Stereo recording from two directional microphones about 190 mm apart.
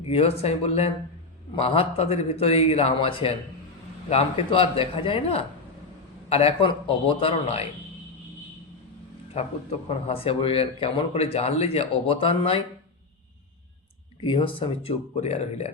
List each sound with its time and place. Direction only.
0.1 s speech: 30° left (ahead or behind)
10.1 s speech: 30° left (ahead or behind)
14.2 s speech: 25° left (ahead or behind)